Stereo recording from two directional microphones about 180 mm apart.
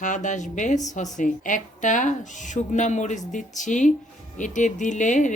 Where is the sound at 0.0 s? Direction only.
45° left (ahead or behind).